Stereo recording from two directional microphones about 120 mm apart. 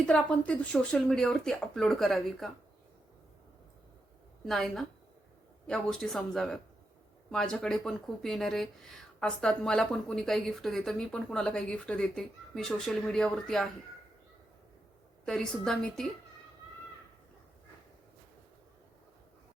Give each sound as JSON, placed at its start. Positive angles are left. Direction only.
{"t": 0.0, "sound": "speech", "side_deg": 10}
{"t": 4.4, "sound": "speech", "side_deg": 0}
{"t": 15.2, "sound": "speech", "side_deg": 5}